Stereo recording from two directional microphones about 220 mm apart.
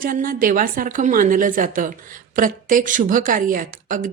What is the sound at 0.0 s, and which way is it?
A woman's voice, 40° right (ahead or behind).